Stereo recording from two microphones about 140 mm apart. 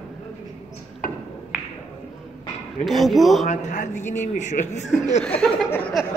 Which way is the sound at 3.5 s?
60° left (ahead or behind).